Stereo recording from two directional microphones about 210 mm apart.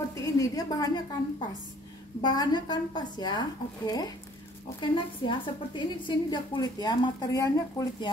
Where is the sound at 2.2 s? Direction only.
20° left (ahead or behind).